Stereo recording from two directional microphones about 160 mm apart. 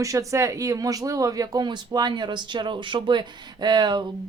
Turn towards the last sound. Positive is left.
turn(degrees=-25)  # may be behind; listen again after turning